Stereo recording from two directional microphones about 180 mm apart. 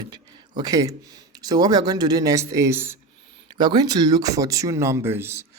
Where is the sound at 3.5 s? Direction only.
25° right (ahead or behind).